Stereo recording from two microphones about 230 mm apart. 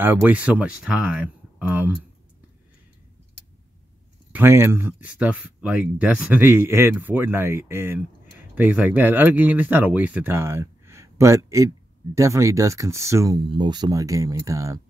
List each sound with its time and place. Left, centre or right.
0.0 s speech: centre
4.3 s speech: centre